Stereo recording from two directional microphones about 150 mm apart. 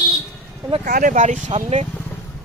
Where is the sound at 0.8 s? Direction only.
65° right (ahead or behind); by 1.9 s 45° right (ahead or behind).